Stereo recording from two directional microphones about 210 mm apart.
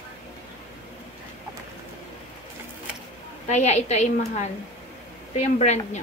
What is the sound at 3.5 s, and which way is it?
Speech, 35° left (ahead or behind).